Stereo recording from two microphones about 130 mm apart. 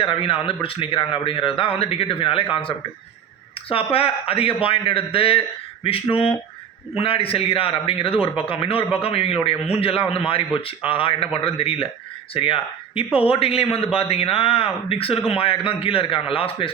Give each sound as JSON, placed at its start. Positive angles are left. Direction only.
{"t": 0.0, "sound": "a man's voice", "side_deg": 45}